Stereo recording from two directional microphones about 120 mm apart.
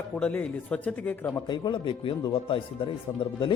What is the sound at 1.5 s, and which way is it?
Speech, 40° left (ahead or behind).